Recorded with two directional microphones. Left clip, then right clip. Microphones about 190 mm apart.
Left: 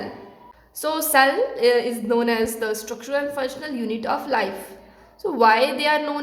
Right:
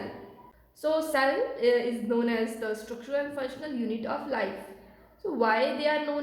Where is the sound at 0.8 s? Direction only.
30° left (ahead or behind).